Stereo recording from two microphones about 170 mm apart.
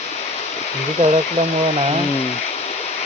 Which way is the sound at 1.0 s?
45° right (ahead or behind).